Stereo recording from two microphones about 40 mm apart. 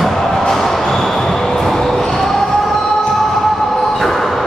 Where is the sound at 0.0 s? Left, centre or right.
Centre.